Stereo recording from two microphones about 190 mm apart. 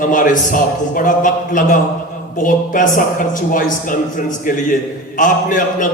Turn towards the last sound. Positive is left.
turn(degrees=45)  # may be behind; listen again after turning